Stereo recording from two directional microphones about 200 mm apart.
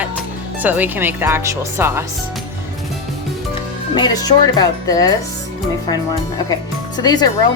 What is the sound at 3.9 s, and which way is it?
Speech, 20° left (ahead or behind).